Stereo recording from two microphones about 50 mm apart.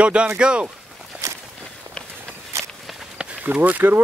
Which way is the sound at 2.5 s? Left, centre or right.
Right.